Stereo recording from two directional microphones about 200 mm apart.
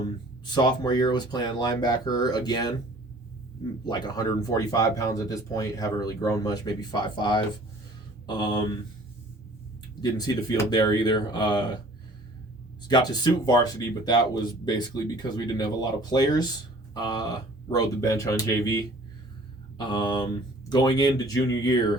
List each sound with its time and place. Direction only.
0.5 s speech: 20° left (ahead or behind)
3.8 s speech: 20° left (ahead or behind)
10.0 s speech: 20° left (ahead or behind)
12.9 s speech: 20° left (ahead or behind)
19.8 s speech: 20° left (ahead or behind)